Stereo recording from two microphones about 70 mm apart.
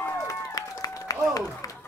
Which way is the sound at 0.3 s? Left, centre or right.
Left.